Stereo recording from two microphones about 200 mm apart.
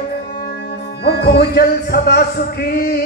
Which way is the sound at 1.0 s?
55° left (ahead or behind).